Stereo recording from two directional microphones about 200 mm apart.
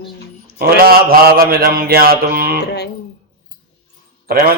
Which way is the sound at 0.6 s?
50° right (ahead or behind).